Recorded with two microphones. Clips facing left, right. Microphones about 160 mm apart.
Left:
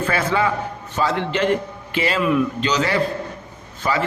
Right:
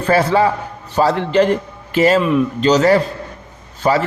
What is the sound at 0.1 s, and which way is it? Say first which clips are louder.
A man's voice: right 9 dB; 35° right (ahead or behind).